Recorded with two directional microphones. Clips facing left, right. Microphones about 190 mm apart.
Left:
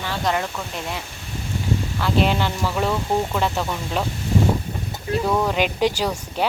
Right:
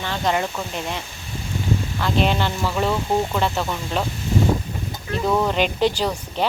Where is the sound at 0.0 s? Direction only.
5° left (ahead or behind).